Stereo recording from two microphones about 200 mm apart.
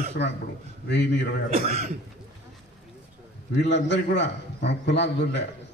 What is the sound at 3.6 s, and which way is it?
A man's voice, 60° left (ahead or behind).